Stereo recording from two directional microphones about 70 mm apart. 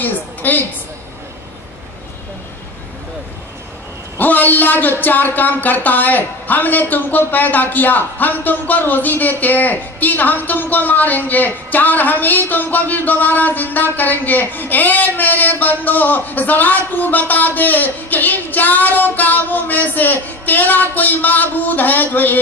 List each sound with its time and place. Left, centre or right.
0.0 s a woman's voice: left
4.2 s speech: left